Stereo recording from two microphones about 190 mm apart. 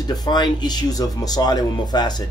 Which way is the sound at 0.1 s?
20° left (ahead or behind).